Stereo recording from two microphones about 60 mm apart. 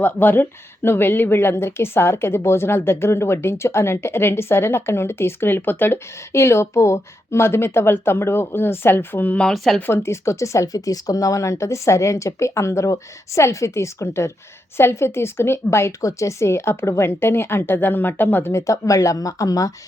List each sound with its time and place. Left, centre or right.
0.0 s speech: left
9.5 s speech: centre
9.8 s speech: left
16.0 s speech: left
18.5 s speech: left